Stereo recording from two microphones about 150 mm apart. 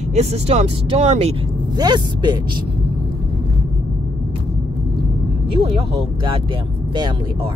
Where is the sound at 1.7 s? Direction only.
30° right (ahead or behind).